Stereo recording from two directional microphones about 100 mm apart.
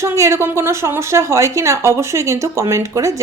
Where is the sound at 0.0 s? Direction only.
30° right (ahead or behind).